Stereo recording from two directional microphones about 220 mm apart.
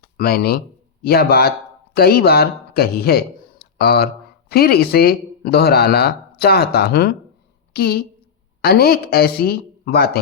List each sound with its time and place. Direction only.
0.2 s a woman's voice: 45° left (ahead or behind)